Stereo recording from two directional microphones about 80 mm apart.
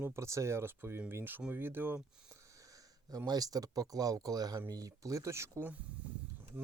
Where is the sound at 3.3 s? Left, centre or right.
Right.